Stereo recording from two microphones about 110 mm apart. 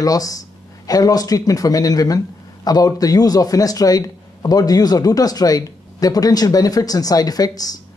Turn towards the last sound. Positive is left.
turn(degrees=35)  # may be behind; listen again after turning